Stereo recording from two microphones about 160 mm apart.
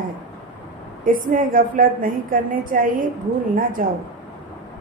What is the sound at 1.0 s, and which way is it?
A woman's voice, 60° right (ahead or behind).